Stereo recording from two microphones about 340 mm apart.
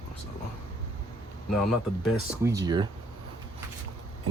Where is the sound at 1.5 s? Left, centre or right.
Centre.